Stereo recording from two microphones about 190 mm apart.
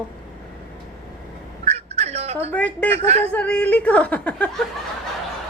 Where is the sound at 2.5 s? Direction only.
10° left (ahead or behind).